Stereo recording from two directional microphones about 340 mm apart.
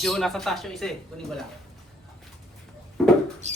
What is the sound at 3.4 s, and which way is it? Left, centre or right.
Mouse, centre.